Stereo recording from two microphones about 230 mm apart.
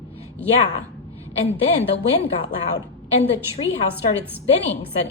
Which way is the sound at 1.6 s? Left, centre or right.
Left.